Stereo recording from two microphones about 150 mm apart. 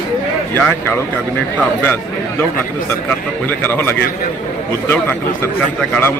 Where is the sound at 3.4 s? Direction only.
15° left (ahead or behind).